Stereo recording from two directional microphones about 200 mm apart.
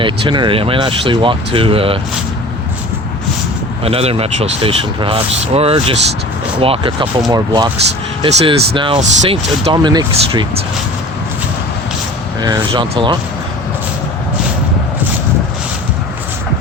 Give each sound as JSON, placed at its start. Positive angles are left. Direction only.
{"t": 0.0, "sound": "speech", "side_deg": -25}
{"t": 3.8, "sound": "speech", "side_deg": -30}
{"t": 9.7, "sound": "speech", "side_deg": -20}
{"t": 12.4, "sound": "speech", "side_deg": -20}